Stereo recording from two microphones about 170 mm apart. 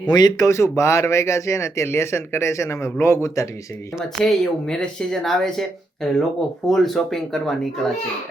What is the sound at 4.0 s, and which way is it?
Speech, centre (ahead or behind).